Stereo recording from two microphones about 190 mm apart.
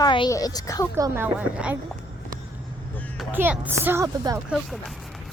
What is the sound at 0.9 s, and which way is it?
Speech, 15° right (ahead or behind).